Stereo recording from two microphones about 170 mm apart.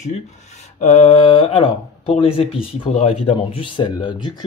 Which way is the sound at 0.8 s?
45° left (ahead or behind).